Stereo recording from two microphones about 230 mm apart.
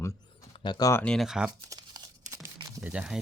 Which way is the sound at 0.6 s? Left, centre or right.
Centre.